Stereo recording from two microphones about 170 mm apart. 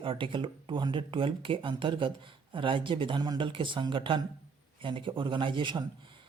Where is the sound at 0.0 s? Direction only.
30° right (ahead or behind).